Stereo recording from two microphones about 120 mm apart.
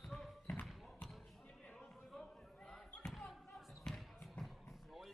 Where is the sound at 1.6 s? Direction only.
10° left (ahead or behind).